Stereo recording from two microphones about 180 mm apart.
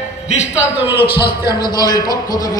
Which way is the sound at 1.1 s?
60° left (ahead or behind).